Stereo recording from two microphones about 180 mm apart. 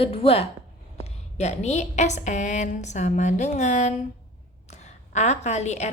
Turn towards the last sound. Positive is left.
turn(degrees=40)  # may be behind; listen again after turning